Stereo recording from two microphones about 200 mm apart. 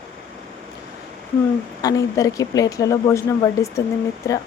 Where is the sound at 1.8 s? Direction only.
15° left (ahead or behind).